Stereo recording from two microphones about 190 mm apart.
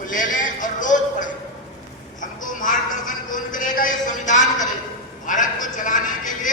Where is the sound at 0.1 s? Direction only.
45° left (ahead or behind).